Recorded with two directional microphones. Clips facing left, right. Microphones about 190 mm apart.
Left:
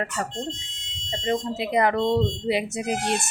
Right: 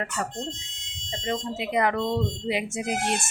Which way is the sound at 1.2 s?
35° left (ahead or behind).